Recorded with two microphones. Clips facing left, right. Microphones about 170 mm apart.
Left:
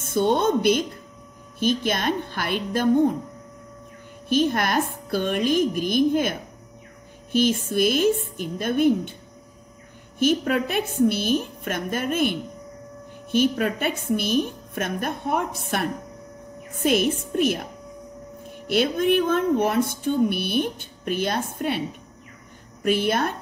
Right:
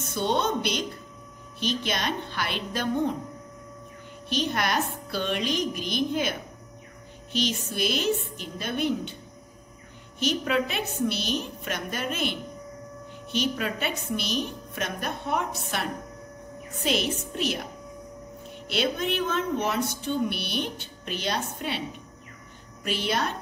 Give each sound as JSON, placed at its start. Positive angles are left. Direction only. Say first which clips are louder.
{"t": 0.0, "sound": "speech", "louder": "left 6 dB", "side_deg": 50}
{"t": 4.3, "sound": "speech", "louder": "left 6 dB", "side_deg": 50}
{"t": 7.3, "sound": "speech", "louder": "left 8 dB", "side_deg": 50}
{"t": 10.1, "sound": "speech", "louder": "left 5 dB", "side_deg": 50}
{"t": 22.8, "sound": "speech", "louder": "left 6 dB", "side_deg": 55}